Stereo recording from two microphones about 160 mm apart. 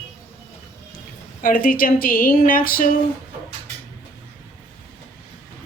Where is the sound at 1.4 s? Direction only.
60° left (ahead or behind).